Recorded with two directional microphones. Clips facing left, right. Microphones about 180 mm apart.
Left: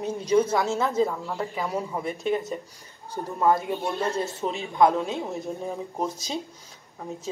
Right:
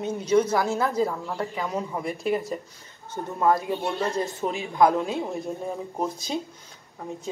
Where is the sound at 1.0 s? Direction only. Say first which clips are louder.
Even; centre (ahead or behind).